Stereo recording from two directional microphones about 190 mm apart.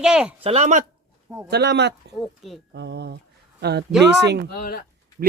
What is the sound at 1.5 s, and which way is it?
Speech, 60° right (ahead or behind).